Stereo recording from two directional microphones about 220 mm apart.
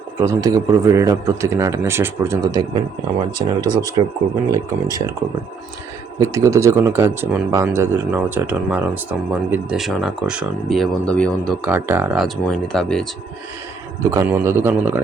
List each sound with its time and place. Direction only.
0.2 s speech: 15° right (ahead or behind)
6.1 s speech: 15° right (ahead or behind); by 11.7 s 5° left (ahead or behind)
11.7 s speech: 10° right (ahead or behind)
14.1 s speech: 10° right (ahead or behind)